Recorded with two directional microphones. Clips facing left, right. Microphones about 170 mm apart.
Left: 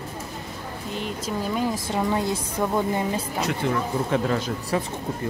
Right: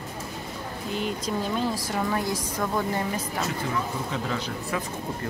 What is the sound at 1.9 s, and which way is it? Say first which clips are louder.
A woman's voice: left 3 dB; 20° left (ahead or behind).